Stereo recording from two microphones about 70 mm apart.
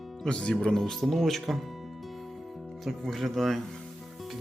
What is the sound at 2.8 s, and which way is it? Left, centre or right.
Speech, centre.